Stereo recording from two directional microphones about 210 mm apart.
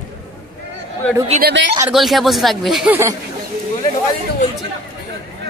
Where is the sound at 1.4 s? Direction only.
55° right (ahead or behind).